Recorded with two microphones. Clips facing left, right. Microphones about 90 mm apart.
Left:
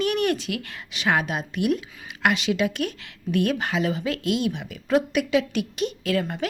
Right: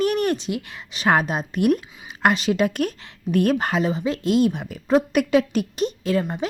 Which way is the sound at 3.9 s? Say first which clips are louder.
Right 5 dB; 30° right (ahead or behind).